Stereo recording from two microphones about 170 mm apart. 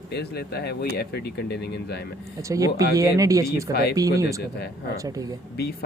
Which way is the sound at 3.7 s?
65° left (ahead or behind).